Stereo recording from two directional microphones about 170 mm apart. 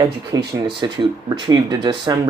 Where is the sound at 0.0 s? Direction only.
25° right (ahead or behind).